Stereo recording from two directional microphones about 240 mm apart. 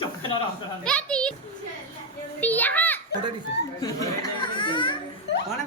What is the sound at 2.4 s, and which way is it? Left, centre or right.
A woman's voice, centre.